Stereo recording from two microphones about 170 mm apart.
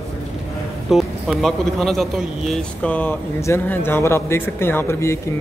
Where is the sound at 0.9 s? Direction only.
Centre (ahead or behind).